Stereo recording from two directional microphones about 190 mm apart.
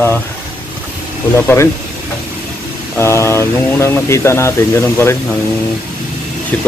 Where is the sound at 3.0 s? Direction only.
15° left (ahead or behind).